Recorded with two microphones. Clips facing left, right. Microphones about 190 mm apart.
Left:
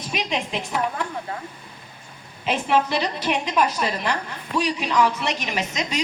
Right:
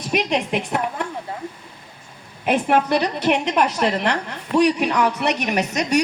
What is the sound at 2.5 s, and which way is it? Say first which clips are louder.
A woman's voice: right 4 dB; 55° right (ahead or behind).